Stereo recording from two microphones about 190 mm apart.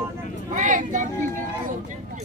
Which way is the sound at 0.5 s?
40° right (ahead or behind).